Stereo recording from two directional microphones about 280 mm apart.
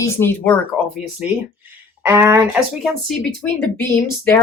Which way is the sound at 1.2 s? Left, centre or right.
Centre.